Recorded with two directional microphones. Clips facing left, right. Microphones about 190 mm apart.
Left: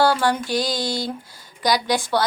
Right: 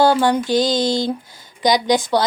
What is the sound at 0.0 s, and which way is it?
A woman's voice, 20° right (ahead or behind).